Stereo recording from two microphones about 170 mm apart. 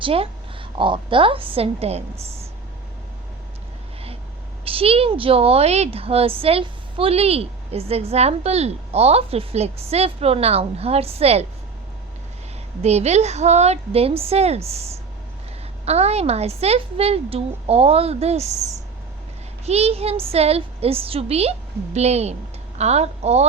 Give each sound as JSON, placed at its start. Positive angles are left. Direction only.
{"t": 0.0, "sound": "speech", "side_deg": -35}
{"t": 4.6, "sound": "speech", "side_deg": -35}
{"t": 12.8, "sound": "speech", "side_deg": -40}
{"t": 19.6, "sound": "speech", "side_deg": -40}